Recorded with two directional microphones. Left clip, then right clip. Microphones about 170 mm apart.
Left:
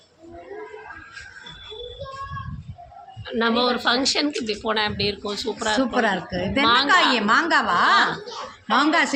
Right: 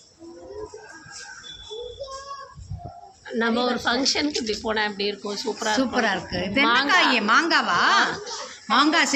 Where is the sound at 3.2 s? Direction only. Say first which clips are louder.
Left 2 dB; 10° left (ahead or behind).